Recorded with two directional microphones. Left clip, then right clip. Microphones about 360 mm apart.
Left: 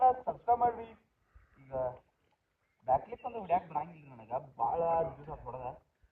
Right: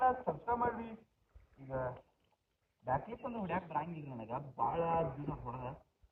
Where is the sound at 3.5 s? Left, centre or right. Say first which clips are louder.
Left 7 dB; centre.